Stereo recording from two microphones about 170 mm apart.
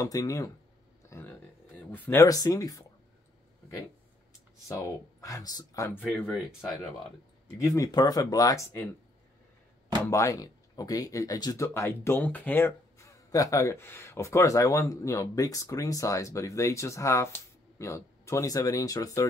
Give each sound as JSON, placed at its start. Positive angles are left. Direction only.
{"t": 0.0, "sound": "speech", "side_deg": 20}
{"t": 1.1, "sound": "a sound", "side_deg": 15}
{"t": 1.8, "sound": "speech", "side_deg": 10}
{"t": 4.6, "sound": "speech", "side_deg": 20}
{"t": 6.0, "sound": "speech", "side_deg": 5}
{"t": 7.5, "sound": "speech", "side_deg": 20}
{"t": 10.0, "sound": "speech", "side_deg": 15}